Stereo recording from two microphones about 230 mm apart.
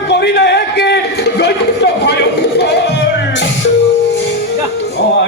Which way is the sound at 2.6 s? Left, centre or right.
Left.